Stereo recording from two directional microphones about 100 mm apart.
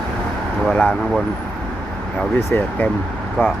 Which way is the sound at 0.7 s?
10° left (ahead or behind).